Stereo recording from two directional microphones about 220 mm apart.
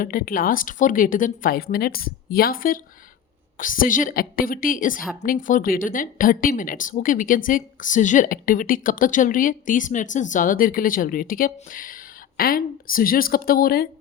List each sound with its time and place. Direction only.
0.0 s speech: 40° left (ahead or behind)